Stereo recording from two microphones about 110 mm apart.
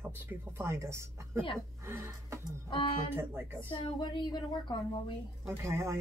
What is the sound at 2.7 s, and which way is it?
Speech, 50° left (ahead or behind).